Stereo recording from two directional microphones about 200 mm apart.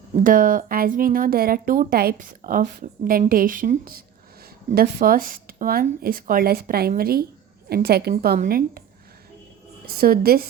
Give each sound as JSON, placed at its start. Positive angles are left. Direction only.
{"t": 0.2, "sound": "a woman's voice", "side_deg": -45}
{"t": 9.8, "sound": "a woman's voice", "side_deg": -50}